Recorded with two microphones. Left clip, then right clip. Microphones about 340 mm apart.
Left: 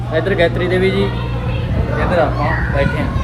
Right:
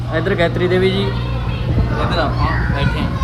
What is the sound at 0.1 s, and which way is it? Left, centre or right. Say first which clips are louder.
Speech: left 2 dB; right.